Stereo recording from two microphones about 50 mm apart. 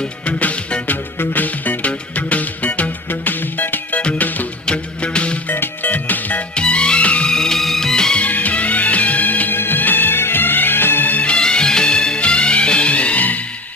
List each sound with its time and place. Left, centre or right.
0.2 s music: left
1.1 s music: left
3.1 s music: left
4.6 s music: left
5.5 s music: left
6.5 s music: centre
7.2 s music: centre
8.2 s music: left
11.1 s music: left
11.3 s music: centre